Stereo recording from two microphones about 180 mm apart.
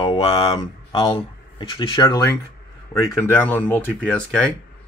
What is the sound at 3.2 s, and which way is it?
Speech, 10° left (ahead or behind).